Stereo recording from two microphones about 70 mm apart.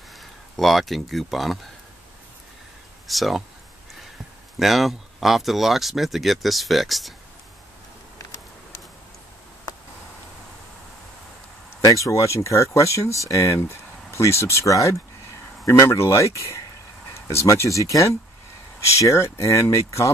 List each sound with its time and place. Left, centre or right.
0.2 s speech: centre
3.1 s speech: centre
4.6 s speech: centre
11.8 s speech: left